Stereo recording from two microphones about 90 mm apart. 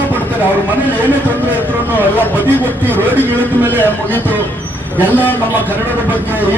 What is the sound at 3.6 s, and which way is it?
Speech, 20° left (ahead or behind).